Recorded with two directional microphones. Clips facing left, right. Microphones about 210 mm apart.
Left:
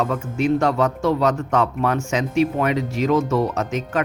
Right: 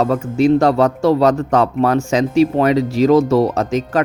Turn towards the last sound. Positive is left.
turn(degrees=-35)  # may be behind; listen again after turning